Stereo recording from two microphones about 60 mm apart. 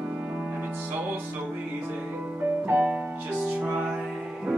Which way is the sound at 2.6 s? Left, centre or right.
Right.